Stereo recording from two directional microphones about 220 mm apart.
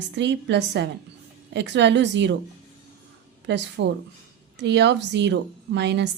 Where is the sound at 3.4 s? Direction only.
50° right (ahead or behind).